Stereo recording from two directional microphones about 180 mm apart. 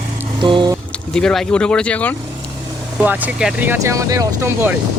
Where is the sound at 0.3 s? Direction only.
25° right (ahead or behind).